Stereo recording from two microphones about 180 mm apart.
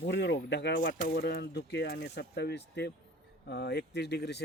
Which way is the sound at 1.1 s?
65° left (ahead or behind).